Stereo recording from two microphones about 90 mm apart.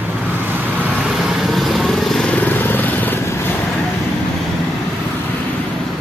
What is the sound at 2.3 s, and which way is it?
Vehicle, 20° left (ahead or behind).